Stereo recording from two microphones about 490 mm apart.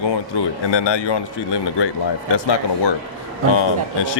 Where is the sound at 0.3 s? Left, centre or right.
Left.